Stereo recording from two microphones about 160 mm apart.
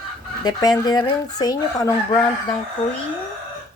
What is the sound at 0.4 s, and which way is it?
Speech, 25° left (ahead or behind).